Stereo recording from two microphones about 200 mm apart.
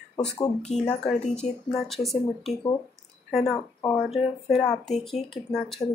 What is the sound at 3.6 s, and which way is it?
Speech, 15° left (ahead or behind).